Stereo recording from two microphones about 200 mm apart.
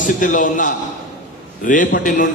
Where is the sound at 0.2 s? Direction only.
40° left (ahead or behind).